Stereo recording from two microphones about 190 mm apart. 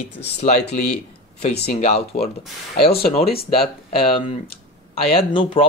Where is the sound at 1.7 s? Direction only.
35° left (ahead or behind).